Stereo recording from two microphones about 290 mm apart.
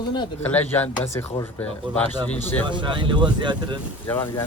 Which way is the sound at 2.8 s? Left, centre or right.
Centre.